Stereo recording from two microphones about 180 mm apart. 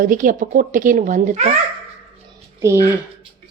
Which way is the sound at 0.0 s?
50° right (ahead or behind).